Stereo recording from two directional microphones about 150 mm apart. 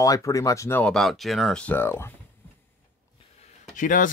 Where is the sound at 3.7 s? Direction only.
60° left (ahead or behind).